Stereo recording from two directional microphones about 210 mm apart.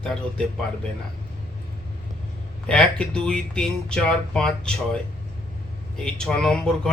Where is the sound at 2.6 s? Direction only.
5° left (ahead or behind).